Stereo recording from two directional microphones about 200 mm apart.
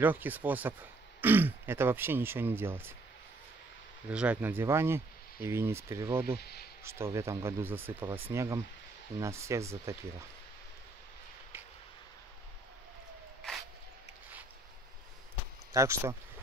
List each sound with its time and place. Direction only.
0.0 s speech: 10° right (ahead or behind)
4.1 s speech: 5° right (ahead or behind)
6.4 s speech: 50° left (ahead or behind)
6.8 s speech: 15° right (ahead or behind)
13.4 s a sound: centre (ahead or behind)
15.7 s speech: 15° right (ahead or behind)